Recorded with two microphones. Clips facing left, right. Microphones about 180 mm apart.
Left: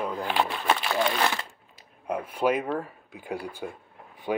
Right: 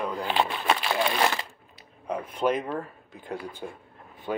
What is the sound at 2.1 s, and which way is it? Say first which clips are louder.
Speech: left 1 dB; 10° left (ahead or behind).